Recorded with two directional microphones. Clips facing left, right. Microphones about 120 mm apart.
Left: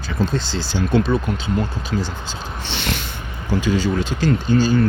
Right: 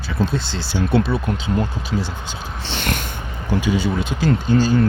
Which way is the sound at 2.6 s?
45° right (ahead or behind).